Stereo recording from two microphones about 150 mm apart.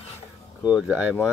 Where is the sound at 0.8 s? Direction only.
5° right (ahead or behind).